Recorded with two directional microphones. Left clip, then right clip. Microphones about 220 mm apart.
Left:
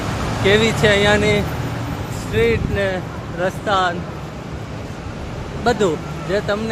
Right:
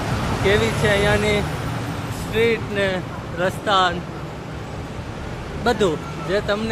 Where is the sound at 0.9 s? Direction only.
45° left (ahead or behind).